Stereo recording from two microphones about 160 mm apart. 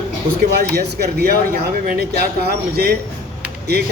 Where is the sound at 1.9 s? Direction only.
75° right (ahead or behind).